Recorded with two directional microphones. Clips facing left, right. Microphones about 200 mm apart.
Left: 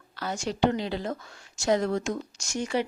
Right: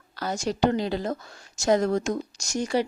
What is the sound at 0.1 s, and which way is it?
A woman's voice, 40° right (ahead or behind).